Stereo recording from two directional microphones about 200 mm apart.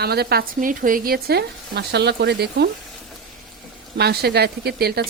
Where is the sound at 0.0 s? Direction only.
55° right (ahead or behind).